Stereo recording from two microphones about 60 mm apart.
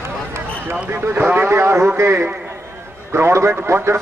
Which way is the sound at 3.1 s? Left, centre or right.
Right.